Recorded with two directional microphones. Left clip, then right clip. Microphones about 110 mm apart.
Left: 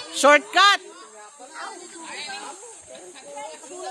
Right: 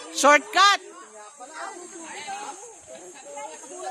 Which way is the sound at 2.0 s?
5° right (ahead or behind).